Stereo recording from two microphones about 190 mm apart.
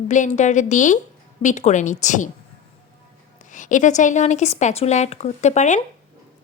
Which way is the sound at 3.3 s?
40° left (ahead or behind).